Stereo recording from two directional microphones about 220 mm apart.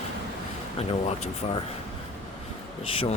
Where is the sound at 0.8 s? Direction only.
30° left (ahead or behind).